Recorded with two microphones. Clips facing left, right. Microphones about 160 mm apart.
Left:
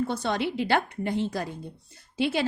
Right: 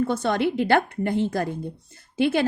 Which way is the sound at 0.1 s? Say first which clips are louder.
Right 5 dB; 50° right (ahead or behind).